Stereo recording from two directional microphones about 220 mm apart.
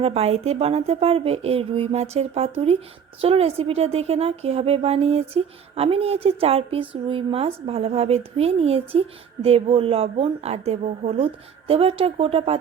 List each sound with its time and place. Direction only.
0.0 s a woman's voice: 25° right (ahead or behind)